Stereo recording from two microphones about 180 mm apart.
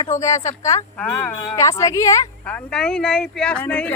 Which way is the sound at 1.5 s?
15° left (ahead or behind).